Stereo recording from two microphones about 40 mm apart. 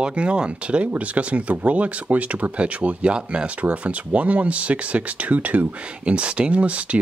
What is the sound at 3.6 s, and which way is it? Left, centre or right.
Speech, right.